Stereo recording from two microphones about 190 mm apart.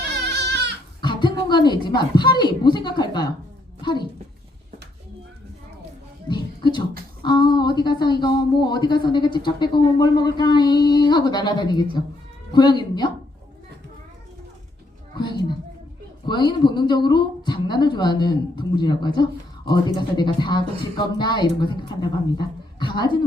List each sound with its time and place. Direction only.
1.0 s speech: 25° left (ahead or behind)
3.8 s a sound: 25° left (ahead or behind)
6.2 s music: 25° left (ahead or behind)
7.2 s a woman's voice: 25° left (ahead or behind)
15.1 s a sound: 25° left (ahead or behind)
16.2 s a woman's voice: 25° left (ahead or behind)